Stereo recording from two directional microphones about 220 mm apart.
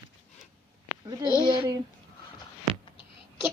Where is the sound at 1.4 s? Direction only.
20° right (ahead or behind).